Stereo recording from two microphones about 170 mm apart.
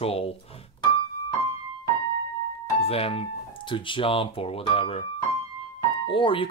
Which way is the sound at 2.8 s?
35° left (ahead or behind).